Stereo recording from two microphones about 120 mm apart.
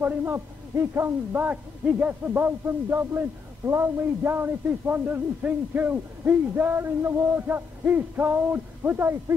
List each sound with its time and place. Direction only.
0.0 s a man's voice: 20° right (ahead or behind)